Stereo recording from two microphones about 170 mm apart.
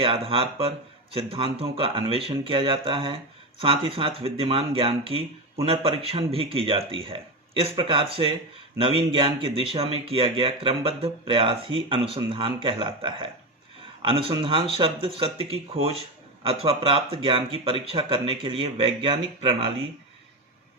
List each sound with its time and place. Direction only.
0.0 s speech: 30° right (ahead or behind)